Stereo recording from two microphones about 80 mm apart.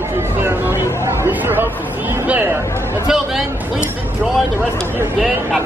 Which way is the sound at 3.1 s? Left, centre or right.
Centre.